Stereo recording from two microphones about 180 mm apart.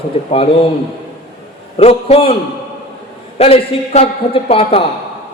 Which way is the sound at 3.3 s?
30° left (ahead or behind).